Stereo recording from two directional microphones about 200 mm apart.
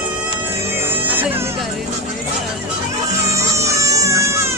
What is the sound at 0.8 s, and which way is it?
Music, 10° right (ahead or behind).